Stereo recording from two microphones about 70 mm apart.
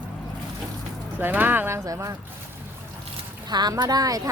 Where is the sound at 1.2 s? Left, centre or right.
Right.